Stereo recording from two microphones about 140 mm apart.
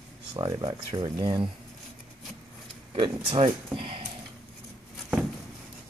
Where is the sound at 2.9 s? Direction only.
40° right (ahead or behind).